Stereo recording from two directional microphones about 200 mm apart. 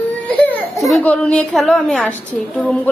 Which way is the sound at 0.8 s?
Centre (ahead or behind).